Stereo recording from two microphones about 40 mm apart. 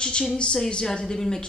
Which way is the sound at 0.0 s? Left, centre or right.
Left.